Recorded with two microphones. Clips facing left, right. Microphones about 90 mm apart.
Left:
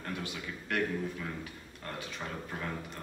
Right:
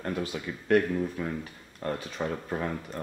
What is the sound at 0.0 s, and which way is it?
Speech, 40° right (ahead or behind).